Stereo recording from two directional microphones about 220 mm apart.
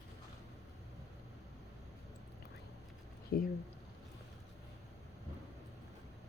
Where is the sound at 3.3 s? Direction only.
45° left (ahead or behind).